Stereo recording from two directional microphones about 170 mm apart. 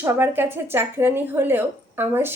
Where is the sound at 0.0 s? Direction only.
10° right (ahead or behind).